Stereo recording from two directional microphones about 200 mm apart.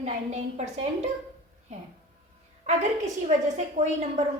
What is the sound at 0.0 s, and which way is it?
A woman's voice, 35° right (ahead or behind).